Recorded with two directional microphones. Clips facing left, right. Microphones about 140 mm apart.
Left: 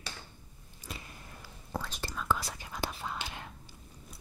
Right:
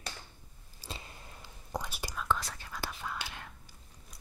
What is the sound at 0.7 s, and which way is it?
Biting, 25° right (ahead or behind).